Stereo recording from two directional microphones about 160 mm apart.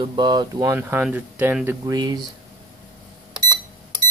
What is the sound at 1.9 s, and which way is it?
Speech, 25° right (ahead or behind).